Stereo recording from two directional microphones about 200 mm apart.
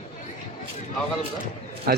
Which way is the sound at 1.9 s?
50° right (ahead or behind).